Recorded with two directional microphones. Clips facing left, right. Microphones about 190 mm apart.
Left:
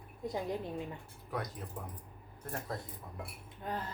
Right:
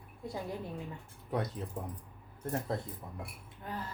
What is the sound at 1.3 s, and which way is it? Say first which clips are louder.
Speech: right 4 dB; 25° right (ahead or behind).